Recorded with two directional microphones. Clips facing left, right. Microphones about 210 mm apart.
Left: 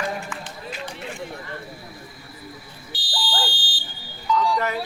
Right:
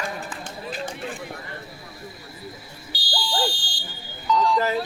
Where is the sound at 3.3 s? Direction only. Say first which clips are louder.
Right 4 dB; 25° right (ahead or behind).